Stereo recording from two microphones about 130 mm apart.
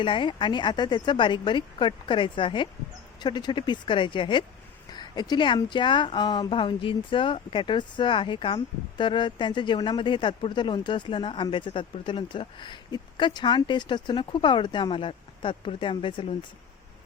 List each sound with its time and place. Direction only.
0.0 s speech: 35° left (ahead or behind)